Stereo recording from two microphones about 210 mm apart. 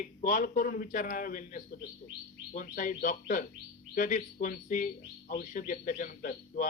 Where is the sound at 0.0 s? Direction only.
40° left (ahead or behind).